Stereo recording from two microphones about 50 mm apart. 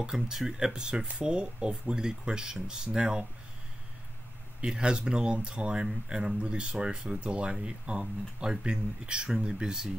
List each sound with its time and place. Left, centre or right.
0.0 s speech: centre
4.6 s speech: centre